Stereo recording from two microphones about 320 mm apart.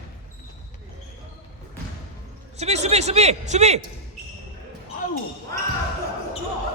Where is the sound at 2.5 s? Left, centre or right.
Centre.